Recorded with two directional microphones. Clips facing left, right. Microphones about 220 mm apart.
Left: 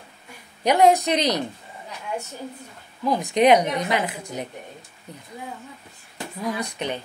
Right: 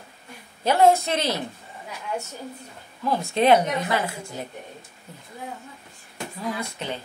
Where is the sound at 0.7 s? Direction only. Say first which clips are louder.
Left 1 dB; 15° left (ahead or behind).